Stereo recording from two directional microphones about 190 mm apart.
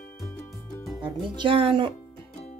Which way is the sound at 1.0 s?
25° right (ahead or behind).